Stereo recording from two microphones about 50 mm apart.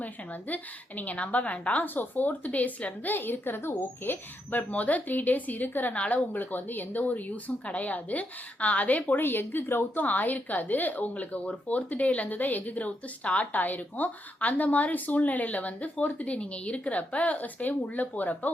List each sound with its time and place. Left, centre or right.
0.0 s speech: left
4.7 s speech: left